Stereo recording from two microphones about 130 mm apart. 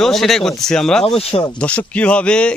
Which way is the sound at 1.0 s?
50° left (ahead or behind).